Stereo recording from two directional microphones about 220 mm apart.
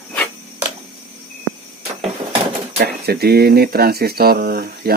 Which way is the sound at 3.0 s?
45° right (ahead or behind).